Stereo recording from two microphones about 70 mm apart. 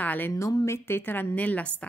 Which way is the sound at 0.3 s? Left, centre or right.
Left.